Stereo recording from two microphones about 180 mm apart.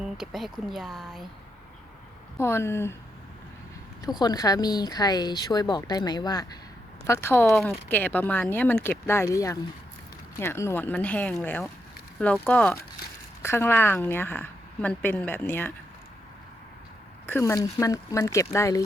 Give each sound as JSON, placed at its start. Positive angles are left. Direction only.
{"t": 0.0, "sound": "speech", "side_deg": 0}
{"t": 2.4, "sound": "a woman's voice", "side_deg": 15}
{"t": 4.0, "sound": "a woman's voice", "side_deg": 20}
{"t": 7.5, "sound": "a woman's voice", "side_deg": 0}
{"t": 17.2, "sound": "a woman's voice", "side_deg": 15}